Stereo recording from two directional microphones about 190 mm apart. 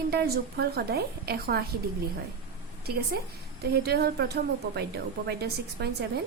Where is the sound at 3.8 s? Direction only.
55° right (ahead or behind).